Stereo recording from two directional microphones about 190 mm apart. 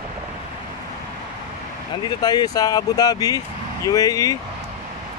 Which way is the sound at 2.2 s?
20° left (ahead or behind).